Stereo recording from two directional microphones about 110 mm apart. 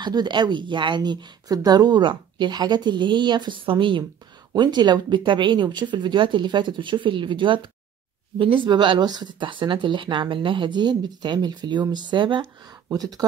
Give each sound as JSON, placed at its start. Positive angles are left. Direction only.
{"t": 0.0, "sound": "speech", "side_deg": -45}